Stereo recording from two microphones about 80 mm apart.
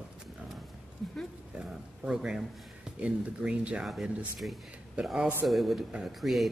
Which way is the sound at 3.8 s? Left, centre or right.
Centre.